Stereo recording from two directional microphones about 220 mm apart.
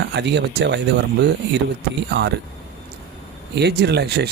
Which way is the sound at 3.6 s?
50° right (ahead or behind).